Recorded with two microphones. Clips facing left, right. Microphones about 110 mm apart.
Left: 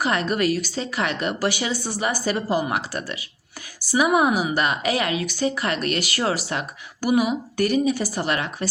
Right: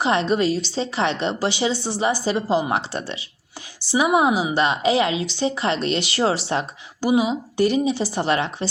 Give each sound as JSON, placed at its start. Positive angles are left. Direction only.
{"t": 0.0, "sound": "a woman's voice", "side_deg": -25}